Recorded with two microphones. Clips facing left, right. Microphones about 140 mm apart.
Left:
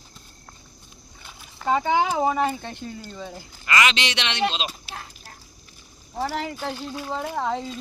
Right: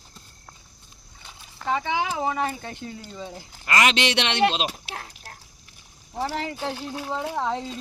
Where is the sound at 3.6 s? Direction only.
50° right (ahead or behind).